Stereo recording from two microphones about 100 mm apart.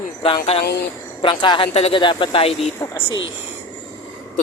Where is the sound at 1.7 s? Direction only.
90° left.